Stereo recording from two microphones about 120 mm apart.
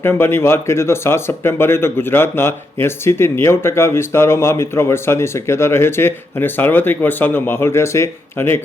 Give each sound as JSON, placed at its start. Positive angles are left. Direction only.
{"t": 0.0, "sound": "speech", "side_deg": 20}